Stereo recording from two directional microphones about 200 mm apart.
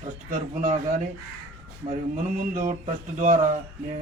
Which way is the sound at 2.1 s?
40° right (ahead or behind).